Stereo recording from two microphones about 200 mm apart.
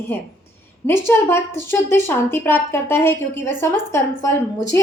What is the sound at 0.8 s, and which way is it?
A woman's voice, 10° left (ahead or behind).